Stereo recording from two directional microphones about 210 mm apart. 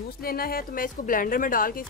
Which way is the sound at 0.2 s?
45° left (ahead or behind).